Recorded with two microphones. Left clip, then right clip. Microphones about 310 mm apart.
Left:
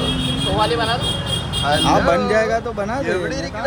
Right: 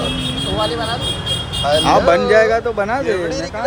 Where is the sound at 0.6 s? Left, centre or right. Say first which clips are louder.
Left 2 dB; left.